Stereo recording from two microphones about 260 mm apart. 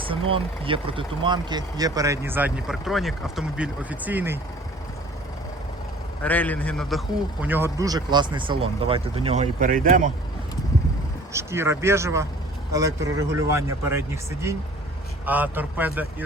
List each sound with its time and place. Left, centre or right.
0.0 s speech: right
6.2 s a man's voice: centre
7.4 s speech: centre; by 10.1 s right
11.3 s speech: centre